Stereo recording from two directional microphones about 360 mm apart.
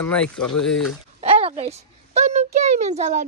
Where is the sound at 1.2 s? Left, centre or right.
Centre.